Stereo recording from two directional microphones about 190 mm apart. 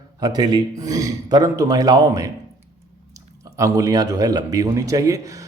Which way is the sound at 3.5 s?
15° right (ahead or behind).